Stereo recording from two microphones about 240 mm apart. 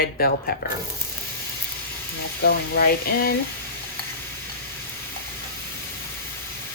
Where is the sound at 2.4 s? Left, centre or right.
Left.